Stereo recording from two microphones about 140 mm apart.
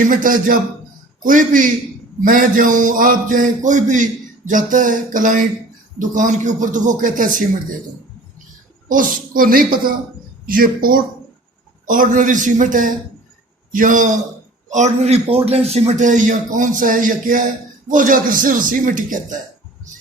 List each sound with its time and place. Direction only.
0.1 s a man's voice: 75° right (ahead or behind)
8.9 s a woman's voice: 75° right (ahead or behind)
11.9 s a man's voice: 75° right (ahead or behind)
14.7 s a man's voice: 55° right (ahead or behind)